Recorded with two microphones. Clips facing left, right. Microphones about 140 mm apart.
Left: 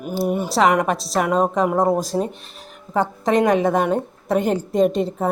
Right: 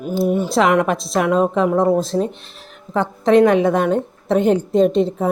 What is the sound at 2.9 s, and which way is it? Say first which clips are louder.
Speech: right 5 dB; 40° left (ahead or behind).